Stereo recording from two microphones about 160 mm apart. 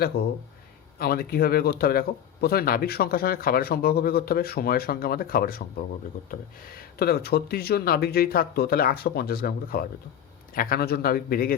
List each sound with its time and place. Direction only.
0.1 s speech: 75° left (ahead or behind)
7.0 s speech: 75° left (ahead or behind)